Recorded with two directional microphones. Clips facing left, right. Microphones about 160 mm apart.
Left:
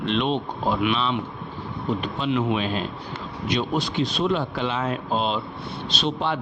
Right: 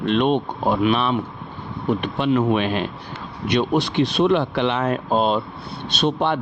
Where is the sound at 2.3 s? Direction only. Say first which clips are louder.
Right 5 dB; 45° right (ahead or behind).